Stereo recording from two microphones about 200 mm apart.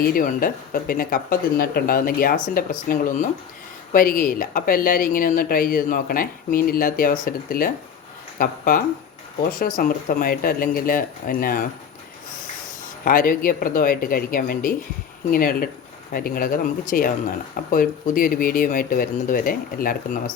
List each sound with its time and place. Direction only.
0.0 s speech: 45° left (ahead or behind)
13.1 s speech: 45° left (ahead or behind)